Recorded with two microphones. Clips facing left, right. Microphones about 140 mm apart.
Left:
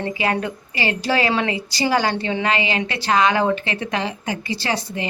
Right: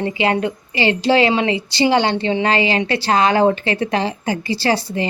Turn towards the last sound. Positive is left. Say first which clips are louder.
# right 6 dB
turn(degrees=-35)  # may be behind; listen again after turning